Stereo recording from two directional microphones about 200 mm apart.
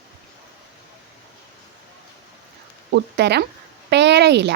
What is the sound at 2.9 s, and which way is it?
A woman's voice, 55° right (ahead or behind).